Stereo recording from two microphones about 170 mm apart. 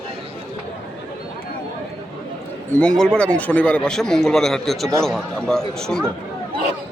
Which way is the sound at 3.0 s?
5° left (ahead or behind).